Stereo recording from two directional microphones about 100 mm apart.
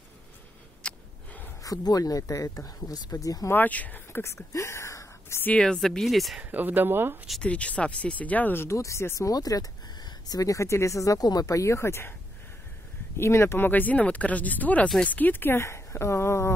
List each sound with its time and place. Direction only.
0.8 s a sound: 15° left (ahead or behind)
1.6 s speech: 35° left (ahead or behind)
3.5 s speech: 15° left (ahead or behind)
5.5 s speech: 10° left (ahead or behind)
6.4 s speech: 20° right (ahead or behind)
7.4 s speech: 15° left (ahead or behind)
13.2 s speech: 25° left (ahead or behind)